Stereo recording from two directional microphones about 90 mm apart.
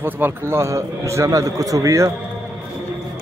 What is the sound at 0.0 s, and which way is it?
A man's voice, 25° right (ahead or behind).